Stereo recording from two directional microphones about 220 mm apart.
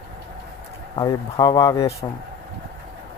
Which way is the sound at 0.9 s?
20° left (ahead or behind).